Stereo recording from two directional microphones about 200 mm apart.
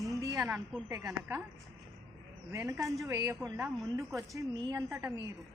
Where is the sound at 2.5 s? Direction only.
15° right (ahead or behind).